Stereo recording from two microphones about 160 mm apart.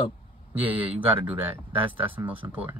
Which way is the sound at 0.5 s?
10° right (ahead or behind).